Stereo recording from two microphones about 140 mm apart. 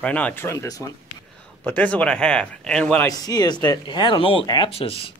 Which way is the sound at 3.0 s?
25° left (ahead or behind).